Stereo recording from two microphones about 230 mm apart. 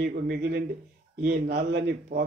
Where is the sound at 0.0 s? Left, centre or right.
Right.